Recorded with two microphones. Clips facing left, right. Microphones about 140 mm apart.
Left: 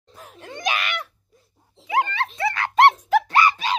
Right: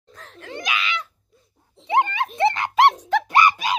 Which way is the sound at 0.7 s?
55° left (ahead or behind).